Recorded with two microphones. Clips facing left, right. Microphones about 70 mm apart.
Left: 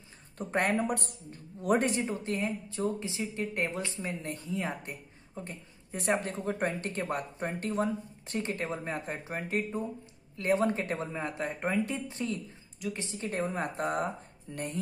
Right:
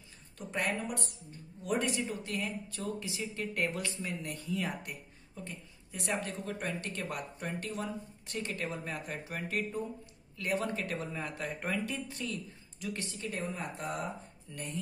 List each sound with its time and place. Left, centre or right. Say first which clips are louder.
0.4 s speech: left 6 dB; left
13.3 s speech: left 7 dB; left